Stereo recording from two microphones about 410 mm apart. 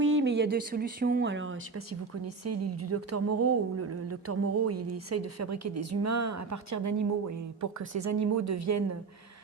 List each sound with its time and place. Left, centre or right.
0.0 s speech: right